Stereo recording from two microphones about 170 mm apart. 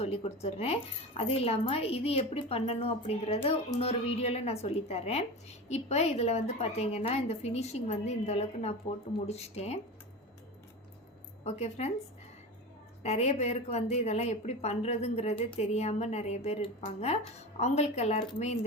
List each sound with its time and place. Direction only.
0.0 s a woman's voice: 35° left (ahead or behind)
11.4 s a woman's voice: 40° left (ahead or behind)
13.0 s a woman's voice: 40° left (ahead or behind)